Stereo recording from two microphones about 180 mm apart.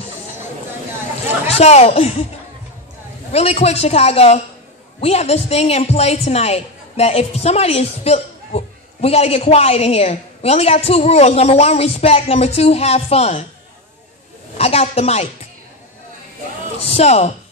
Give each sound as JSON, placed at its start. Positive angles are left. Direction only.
{"t": 1.5, "sound": "a woman's voice", "side_deg": 35}
{"t": 3.3, "sound": "a woman's voice", "side_deg": 35}
{"t": 14.6, "sound": "a woman's voice", "side_deg": 35}
{"t": 16.9, "sound": "a woman's voice", "side_deg": 35}